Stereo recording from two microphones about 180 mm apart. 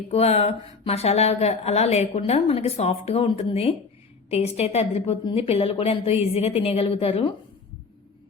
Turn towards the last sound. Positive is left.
turn(degrees=35)  # may be behind; listen again after turning